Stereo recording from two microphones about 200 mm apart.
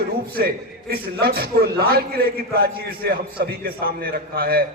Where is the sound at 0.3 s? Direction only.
50° right (ahead or behind).